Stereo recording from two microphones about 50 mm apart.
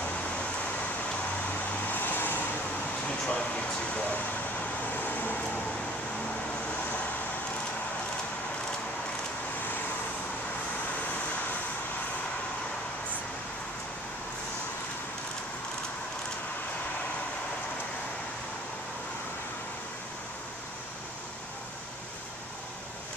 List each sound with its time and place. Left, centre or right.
1.7 s vehicle: left
3.3 s speech: left
4.6 s vehicle: left